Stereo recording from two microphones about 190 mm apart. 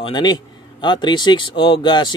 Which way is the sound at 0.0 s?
25° left (ahead or behind).